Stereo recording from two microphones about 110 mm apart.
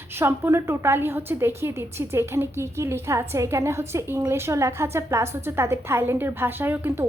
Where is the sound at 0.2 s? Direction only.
20° right (ahead or behind).